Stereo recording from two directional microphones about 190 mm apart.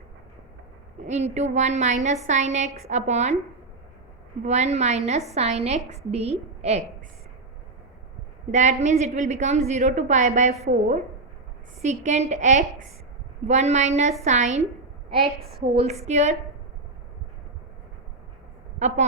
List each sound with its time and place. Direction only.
1.0 s a woman's voice: 35° right (ahead or behind)
4.4 s a woman's voice: 35° right (ahead or behind)
8.5 s a woman's voice: 40° right (ahead or behind)
18.8 s a woman's voice: 40° right (ahead or behind)